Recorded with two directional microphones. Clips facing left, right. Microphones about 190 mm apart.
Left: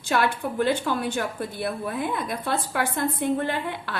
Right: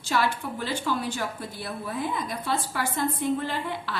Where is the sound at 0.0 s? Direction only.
55° left (ahead or behind).